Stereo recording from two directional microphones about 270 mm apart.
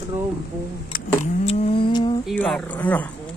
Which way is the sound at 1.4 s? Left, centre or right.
Left.